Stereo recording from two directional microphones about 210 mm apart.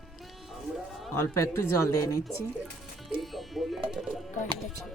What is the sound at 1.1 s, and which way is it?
Speech, 15° left (ahead or behind).